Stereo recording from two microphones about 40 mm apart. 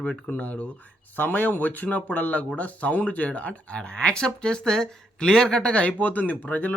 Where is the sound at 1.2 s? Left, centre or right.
Left; by 5.8 s centre.